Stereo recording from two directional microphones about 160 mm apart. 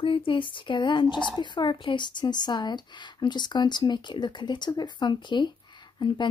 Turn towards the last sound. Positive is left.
turn(degrees=30)  # may be behind; listen again after turning